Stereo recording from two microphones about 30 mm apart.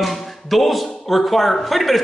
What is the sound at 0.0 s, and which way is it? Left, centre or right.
A woman's voice, centre.